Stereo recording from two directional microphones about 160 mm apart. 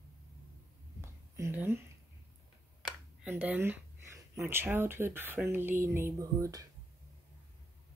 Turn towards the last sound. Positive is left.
turn(degrees=-20)  # may be behind; listen again after turning